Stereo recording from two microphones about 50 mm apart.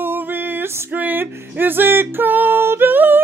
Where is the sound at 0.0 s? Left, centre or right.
Right.